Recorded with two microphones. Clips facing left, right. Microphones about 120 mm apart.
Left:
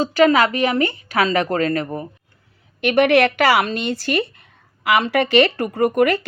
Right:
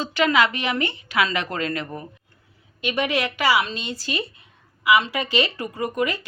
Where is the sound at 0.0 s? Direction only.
40° left (ahead or behind).